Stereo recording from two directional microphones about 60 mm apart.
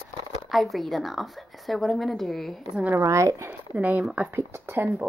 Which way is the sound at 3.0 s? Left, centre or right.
Right.